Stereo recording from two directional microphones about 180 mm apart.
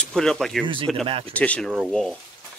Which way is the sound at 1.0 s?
30° right (ahead or behind).